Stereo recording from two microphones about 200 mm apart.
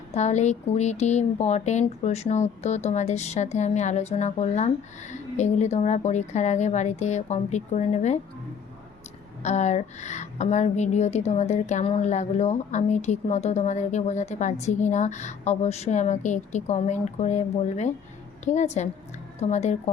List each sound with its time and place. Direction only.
0.1 s a woman's voice: 35° left (ahead or behind)
9.4 s a woman's voice: 35° left (ahead or behind)